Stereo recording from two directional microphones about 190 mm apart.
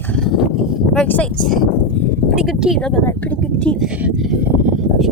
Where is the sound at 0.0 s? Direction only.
5° left (ahead or behind).